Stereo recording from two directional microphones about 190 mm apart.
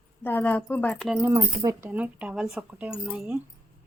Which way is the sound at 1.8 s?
10° right (ahead or behind).